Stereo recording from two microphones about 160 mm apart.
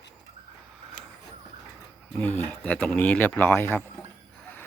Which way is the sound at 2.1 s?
10° left (ahead or behind).